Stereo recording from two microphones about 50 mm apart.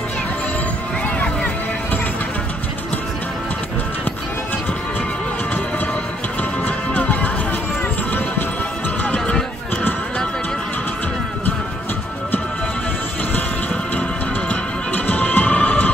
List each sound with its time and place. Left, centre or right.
6.6 s music: left
9.0 s music: left
14.5 s music: left